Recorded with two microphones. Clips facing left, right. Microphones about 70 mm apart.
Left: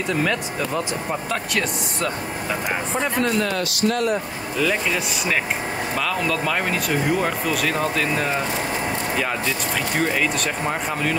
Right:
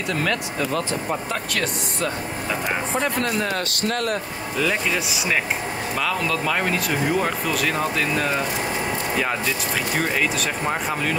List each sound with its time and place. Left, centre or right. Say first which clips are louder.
0.1 s speech: left 1 dB; centre
3.0 s speech: left 3 dB; centre
3.5 s speech: left 3 dB; right
4.6 s speech: left 1 dB; centre
9.9 s speech: left 1 dB; centre